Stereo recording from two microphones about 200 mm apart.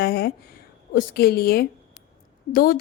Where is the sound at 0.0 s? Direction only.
50° left (ahead or behind).